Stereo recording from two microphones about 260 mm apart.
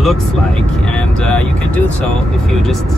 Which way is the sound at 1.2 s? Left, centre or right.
Centre.